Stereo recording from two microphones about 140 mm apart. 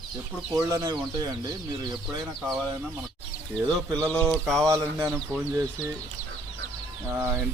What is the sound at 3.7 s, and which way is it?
Speech, 30° right (ahead or behind).